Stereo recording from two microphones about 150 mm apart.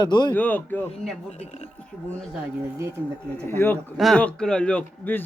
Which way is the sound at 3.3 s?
15° left (ahead or behind).